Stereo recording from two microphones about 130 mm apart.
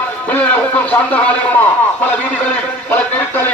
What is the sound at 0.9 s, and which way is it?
Speech, 10° left (ahead or behind).